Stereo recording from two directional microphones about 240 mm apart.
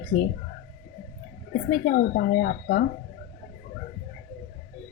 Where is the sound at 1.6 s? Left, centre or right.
Left.